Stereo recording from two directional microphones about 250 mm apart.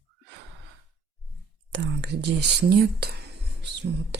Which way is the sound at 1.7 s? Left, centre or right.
Right.